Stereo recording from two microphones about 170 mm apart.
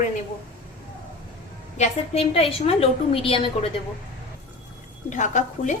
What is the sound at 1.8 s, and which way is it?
A woman's voice, 35° left (ahead or behind).